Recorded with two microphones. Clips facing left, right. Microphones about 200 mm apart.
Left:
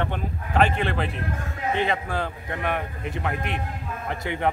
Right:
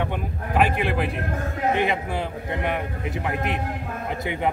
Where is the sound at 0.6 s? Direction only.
10° right (ahead or behind).